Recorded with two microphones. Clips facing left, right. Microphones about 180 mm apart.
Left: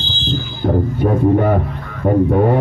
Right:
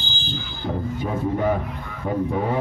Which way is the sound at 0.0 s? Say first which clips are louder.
Left 8 dB; 10° right (ahead or behind).